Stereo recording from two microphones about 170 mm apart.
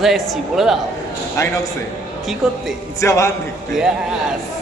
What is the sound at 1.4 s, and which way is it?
Speech, 20° left (ahead or behind).